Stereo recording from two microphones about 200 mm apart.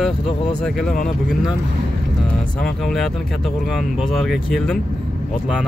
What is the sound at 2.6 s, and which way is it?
Speech, centre (ahead or behind).